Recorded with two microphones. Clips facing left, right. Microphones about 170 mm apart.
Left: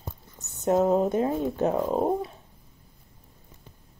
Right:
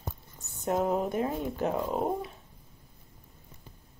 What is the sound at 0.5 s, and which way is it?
A woman's voice, 25° left (ahead or behind).